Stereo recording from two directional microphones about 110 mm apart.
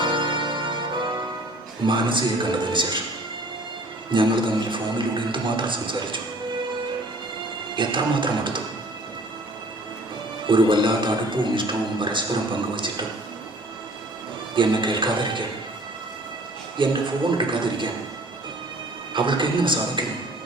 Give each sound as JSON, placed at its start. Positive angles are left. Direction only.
{"t": 0.0, "sound": "music", "side_deg": -50}
{"t": 1.8, "sound": "a man's voice", "side_deg": -45}
{"t": 4.1, "sound": "a man's voice", "side_deg": -50}
{"t": 7.8, "sound": "a man's voice", "side_deg": -50}
{"t": 10.4, "sound": "a man's voice", "side_deg": -50}
{"t": 14.5, "sound": "a man's voice", "side_deg": -45}
{"t": 16.8, "sound": "a man's voice", "side_deg": -45}
{"t": 19.1, "sound": "a man's voice", "side_deg": -45}